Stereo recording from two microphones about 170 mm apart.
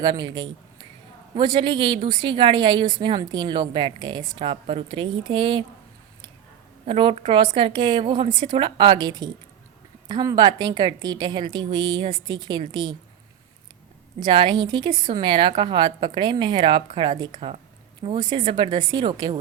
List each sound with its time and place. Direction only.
0.0 s a woman's voice: 25° right (ahead or behind)
6.8 s a woman's voice: 30° right (ahead or behind)
14.2 s a woman's voice: 25° right (ahead or behind)